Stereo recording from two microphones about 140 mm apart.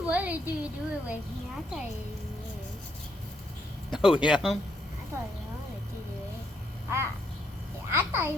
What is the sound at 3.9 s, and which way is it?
Speech, 5° right (ahead or behind).